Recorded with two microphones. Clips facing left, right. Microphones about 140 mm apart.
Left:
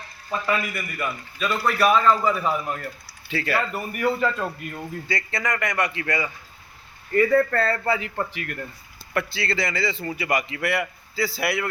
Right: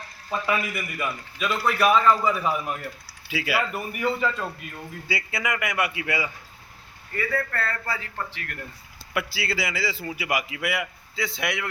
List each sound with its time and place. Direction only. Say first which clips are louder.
0.3 s a man's voice: left 1 dB; 10° right (ahead or behind)
4.0 s a man's voice: left 3 dB; 5° left (ahead or behind)
5.0 s a man's voice: even; 5° right (ahead or behind)
7.1 s speech: left 10 dB; 40° left (ahead or behind)
7.9 s a man's voice: left 7 dB; 20° left (ahead or behind)
9.1 s a man's voice: left 2 dB; 5° right (ahead or behind)